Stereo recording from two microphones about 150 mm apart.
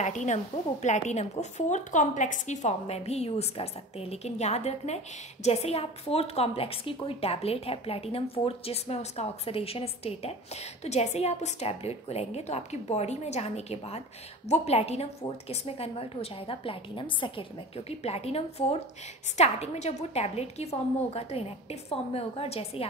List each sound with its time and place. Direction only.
0.0 s a woman's voice: 50° left (ahead or behind)